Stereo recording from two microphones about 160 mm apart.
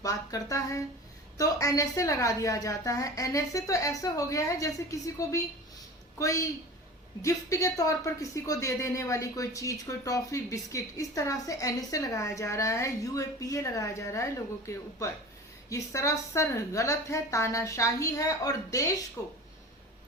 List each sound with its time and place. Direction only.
0.0 s speech: 20° left (ahead or behind)